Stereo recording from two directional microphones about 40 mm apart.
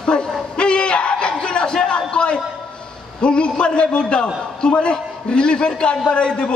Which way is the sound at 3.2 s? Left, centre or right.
Left.